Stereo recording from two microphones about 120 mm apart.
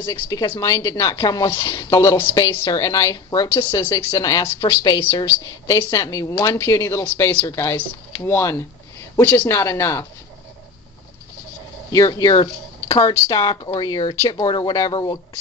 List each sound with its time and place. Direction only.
0.0 s speech: 30° left (ahead or behind)
11.9 s speech: 30° left (ahead or behind)
14.4 s speech: 35° left (ahead or behind)